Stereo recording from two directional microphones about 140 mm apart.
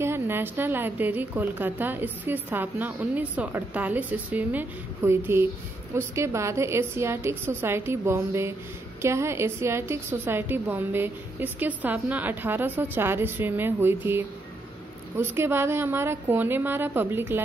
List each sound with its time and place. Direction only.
0.0 s a woman's voice: 15° right (ahead or behind)